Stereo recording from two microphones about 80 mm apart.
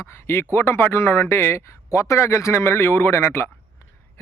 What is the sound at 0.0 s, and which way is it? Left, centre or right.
A man's voice, left.